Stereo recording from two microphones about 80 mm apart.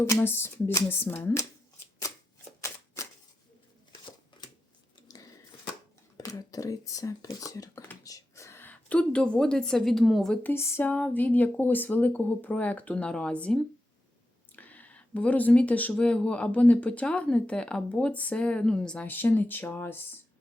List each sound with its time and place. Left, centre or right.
0.0 s speech: left
2.6 s shuffling cards: left
6.1 s speech: left
8.0 s whispering: left
8.4 s a sound: left
8.7 s speech: centre
10.4 s speech: left; by 19.0 s centre
19.0 s speech: left